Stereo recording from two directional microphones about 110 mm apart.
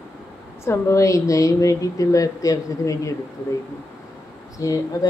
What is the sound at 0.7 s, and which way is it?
A woman's voice, 25° left (ahead or behind).